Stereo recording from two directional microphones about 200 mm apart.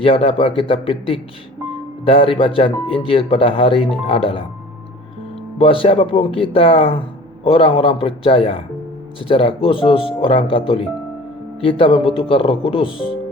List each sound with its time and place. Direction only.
0.0 s speech: 25° left (ahead or behind)
5.5 s speech: 25° left (ahead or behind)
11.6 s speech: 25° left (ahead or behind)